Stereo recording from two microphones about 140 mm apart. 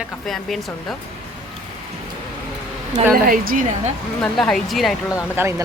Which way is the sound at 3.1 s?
90° right.